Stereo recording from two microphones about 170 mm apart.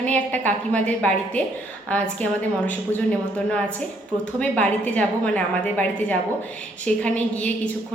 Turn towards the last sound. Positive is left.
turn(degrees=5)  # may be behind; listen again after turning